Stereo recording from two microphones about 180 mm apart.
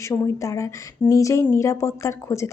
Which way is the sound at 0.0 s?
15° left (ahead or behind).